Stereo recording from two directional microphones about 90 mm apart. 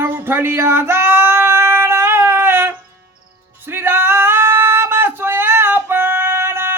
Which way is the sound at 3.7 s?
25° right (ahead or behind).